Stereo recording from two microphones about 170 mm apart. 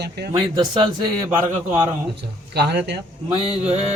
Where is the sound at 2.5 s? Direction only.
80° right.